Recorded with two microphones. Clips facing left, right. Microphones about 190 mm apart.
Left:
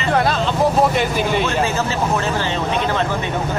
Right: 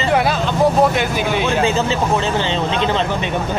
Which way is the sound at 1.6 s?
20° right (ahead or behind).